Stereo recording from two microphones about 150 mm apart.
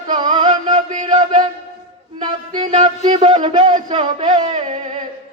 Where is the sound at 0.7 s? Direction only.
55° right (ahead or behind).